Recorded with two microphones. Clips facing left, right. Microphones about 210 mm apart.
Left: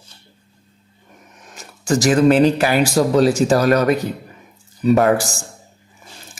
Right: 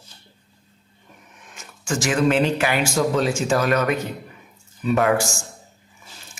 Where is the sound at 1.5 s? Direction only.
35° left (ahead or behind).